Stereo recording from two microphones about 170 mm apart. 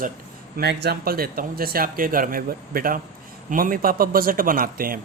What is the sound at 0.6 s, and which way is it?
Speech, 70° right (ahead or behind).